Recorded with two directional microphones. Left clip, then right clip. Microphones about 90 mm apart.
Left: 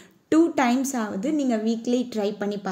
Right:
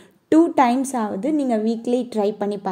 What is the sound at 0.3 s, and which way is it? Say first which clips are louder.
A woman's voice: right 5 dB; 35° right (ahead or behind).